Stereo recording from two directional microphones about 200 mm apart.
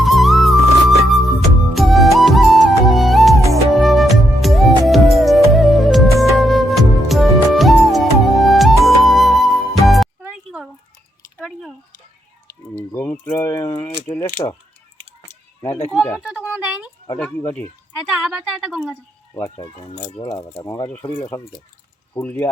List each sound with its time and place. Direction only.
0.0 s music: centre (ahead or behind)
11.3 s a sound: centre (ahead or behind)
12.7 s keys jangling: 10° left (ahead or behind)
14.1 s rattle: 15° left (ahead or behind)
15.9 s a woman's voice: 5° left (ahead or behind)
16.2 s a sound: 5° right (ahead or behind)
17.2 s speech: 5° left (ahead or behind)
18.1 s a woman's voice: 5° right (ahead or behind)
19.3 s speech: 15° left (ahead or behind)